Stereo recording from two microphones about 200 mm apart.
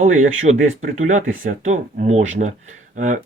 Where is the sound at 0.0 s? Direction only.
40° right (ahead or behind).